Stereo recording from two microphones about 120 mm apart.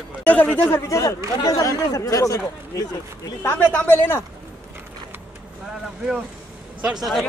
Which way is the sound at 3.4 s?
15° left (ahead or behind).